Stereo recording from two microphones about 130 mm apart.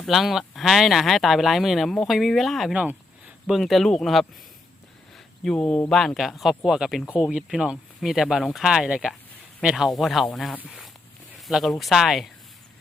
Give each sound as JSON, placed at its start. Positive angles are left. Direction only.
{"t": 0.0, "sound": "speech", "side_deg": 0}
{"t": 5.1, "sound": "a sound", "side_deg": 5}
{"t": 5.9, "sound": "speech", "side_deg": 5}